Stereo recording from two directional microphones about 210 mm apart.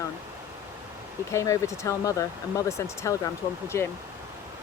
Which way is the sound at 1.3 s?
15° left (ahead or behind).